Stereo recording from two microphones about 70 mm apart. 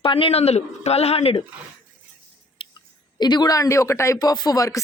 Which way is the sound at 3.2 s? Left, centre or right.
Left.